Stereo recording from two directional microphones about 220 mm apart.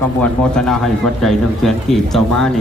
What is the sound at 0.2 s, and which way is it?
Speech, 5° left (ahead or behind).